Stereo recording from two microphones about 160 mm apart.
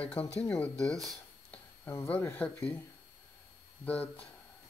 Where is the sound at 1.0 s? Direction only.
Centre (ahead or behind).